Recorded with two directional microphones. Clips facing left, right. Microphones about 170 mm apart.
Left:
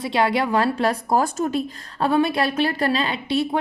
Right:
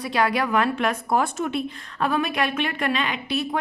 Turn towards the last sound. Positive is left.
turn(degrees=30)  # may be behind; listen again after turning